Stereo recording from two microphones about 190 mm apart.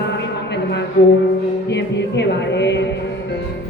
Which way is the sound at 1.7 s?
65° left (ahead or behind).